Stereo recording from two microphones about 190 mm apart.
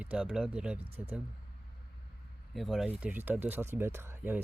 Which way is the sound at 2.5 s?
Centre (ahead or behind).